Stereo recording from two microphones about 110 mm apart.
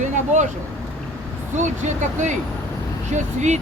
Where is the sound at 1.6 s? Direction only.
90° right.